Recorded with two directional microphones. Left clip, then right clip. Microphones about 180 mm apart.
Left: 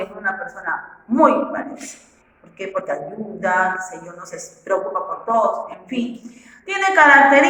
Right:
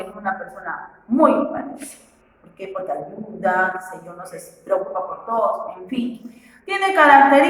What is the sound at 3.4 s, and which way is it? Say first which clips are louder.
Speech: left 1 dB; 20° left (ahead or behind).